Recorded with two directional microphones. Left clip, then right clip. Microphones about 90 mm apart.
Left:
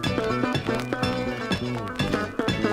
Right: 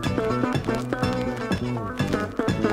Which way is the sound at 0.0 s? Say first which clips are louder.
Even; 35° left (ahead or behind).